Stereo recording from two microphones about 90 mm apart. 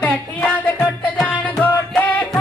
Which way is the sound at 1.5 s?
10° left (ahead or behind).